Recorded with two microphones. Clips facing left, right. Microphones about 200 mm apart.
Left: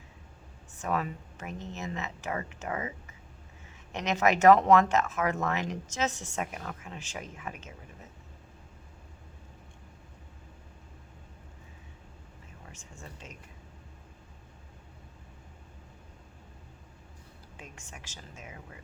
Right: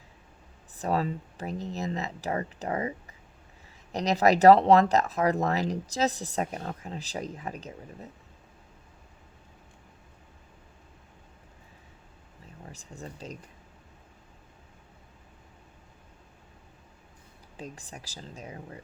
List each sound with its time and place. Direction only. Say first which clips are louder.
0.8 s speech: right 4 dB; 35° right (ahead or behind)
12.6 s speech: right 7 dB; 35° right (ahead or behind)
17.6 s speech: right 7 dB; 35° right (ahead or behind)